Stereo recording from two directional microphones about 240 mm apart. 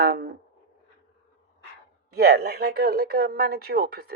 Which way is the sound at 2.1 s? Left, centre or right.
Right.